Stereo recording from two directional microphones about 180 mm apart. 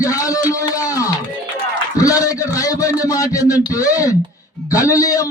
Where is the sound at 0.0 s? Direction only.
20° left (ahead or behind).